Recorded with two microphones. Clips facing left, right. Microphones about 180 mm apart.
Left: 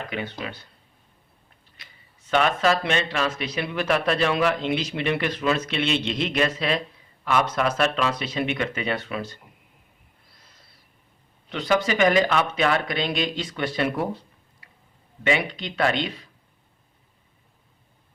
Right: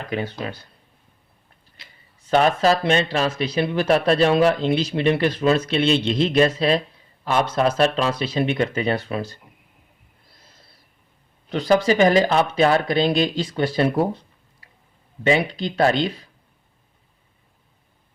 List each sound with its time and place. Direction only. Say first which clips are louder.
0.1 s speech: right 5 dB; 40° right (ahead or behind)
2.3 s speech: right 4 dB; 35° right (ahead or behind)
11.4 s speech: right 5 dB; 35° right (ahead or behind)
15.2 s speech: right 5 dB; 35° right (ahead or behind)